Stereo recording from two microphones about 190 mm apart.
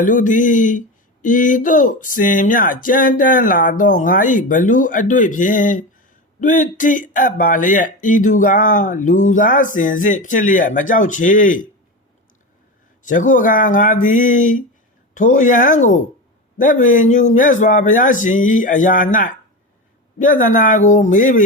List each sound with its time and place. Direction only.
0.0 s speech: 45° left (ahead or behind)
13.0 s speech: 40° left (ahead or behind)
20.1 s speech: 45° left (ahead or behind)